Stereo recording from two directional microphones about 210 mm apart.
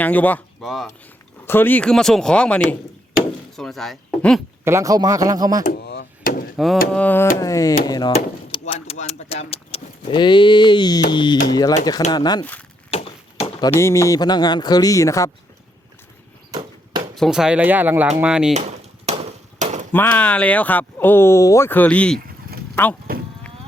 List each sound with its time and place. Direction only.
0.0 s speech: 10° left (ahead or behind)
3.2 s a sound: centre (ahead or behind)
4.6 s speech: 15° right (ahead or behind)
5.7 s a sound: 55° left (ahead or behind)
6.9 s speech: 10° left (ahead or behind)
8.1 s speech: 30° left (ahead or behind)
12.9 s chop: 30° left (ahead or behind)
13.7 s speech: 15° left (ahead or behind)
16.5 s horse: 20° right (ahead or behind)
17.2 s speech: centre (ahead or behind)
19.0 s chop: 30° right (ahead or behind)
19.9 s speech: 10° left (ahead or behind)
22.5 s vehicle: 45° right (ahead or behind)
23.1 s livestock: 45° right (ahead or behind)